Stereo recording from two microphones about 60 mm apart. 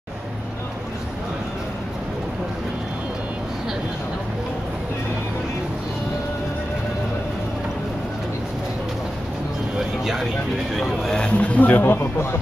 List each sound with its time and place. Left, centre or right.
9.8 s vehicle: centre
10.8 s speech: centre
11.3 s speech: left